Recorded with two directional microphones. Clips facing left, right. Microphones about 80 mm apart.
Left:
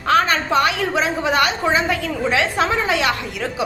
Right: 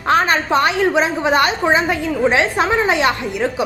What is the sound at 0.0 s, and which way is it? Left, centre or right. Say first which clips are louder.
A woman's voice: right 1 dB; right.